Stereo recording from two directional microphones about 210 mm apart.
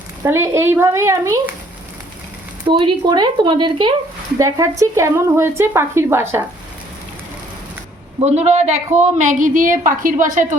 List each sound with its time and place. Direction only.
0.2 s a woman's voice: 15° right (ahead or behind)
2.6 s a woman's voice: 25° right (ahead or behind)
8.2 s a woman's voice: 30° right (ahead or behind)